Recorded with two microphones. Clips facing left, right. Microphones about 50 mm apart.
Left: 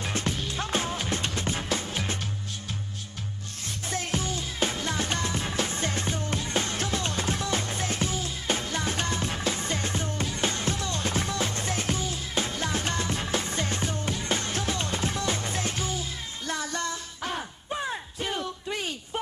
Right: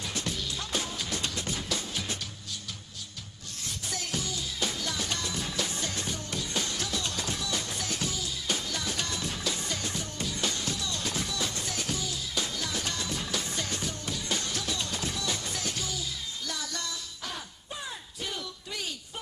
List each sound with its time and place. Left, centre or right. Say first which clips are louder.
0.0 s music: left 4 dB; left
3.9 s music: left 5 dB; left